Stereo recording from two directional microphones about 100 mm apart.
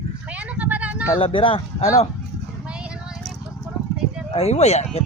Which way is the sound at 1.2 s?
60° left (ahead or behind).